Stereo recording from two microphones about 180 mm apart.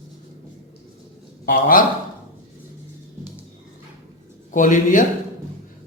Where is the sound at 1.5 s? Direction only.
50° left (ahead or behind).